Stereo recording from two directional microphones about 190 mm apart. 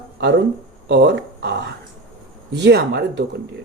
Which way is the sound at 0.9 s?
60° right (ahead or behind).